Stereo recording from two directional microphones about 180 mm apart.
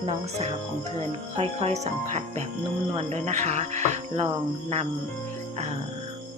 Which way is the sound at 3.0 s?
35° right (ahead or behind).